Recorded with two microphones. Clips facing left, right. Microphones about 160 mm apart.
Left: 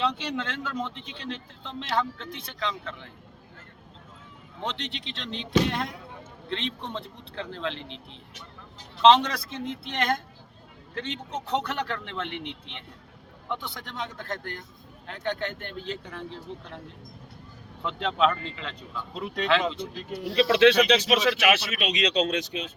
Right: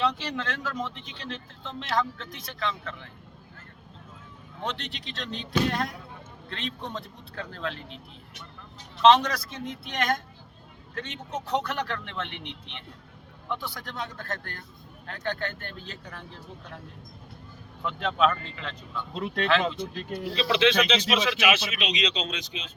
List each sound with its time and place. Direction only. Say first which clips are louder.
0.3 s speech: left 1 dB; 25° left (ahead or behind)
4.6 s speech: left 1 dB; 20° left (ahead or behind)
13.7 s speech: even; 20° left (ahead or behind)
17.8 s speech: even; 20° left (ahead or behind)
18.9 s speech: right 2 dB; centre (ahead or behind)
20.3 s speech: left 5 dB; 70° left (ahead or behind)
20.8 s speech: left 3 dB; 40° left (ahead or behind)